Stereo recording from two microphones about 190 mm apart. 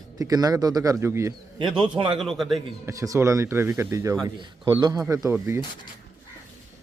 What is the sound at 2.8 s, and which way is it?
A man's voice, 15° right (ahead or behind).